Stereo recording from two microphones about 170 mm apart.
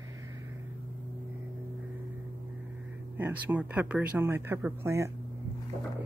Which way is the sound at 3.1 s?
10° right (ahead or behind).